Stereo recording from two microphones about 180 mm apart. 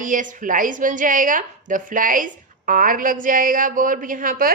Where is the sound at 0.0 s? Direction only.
45° right (ahead or behind).